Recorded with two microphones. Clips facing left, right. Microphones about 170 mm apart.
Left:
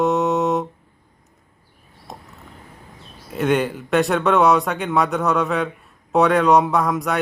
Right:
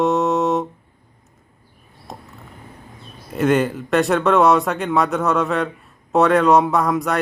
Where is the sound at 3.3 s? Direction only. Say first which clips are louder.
Right 2 dB; centre (ahead or behind).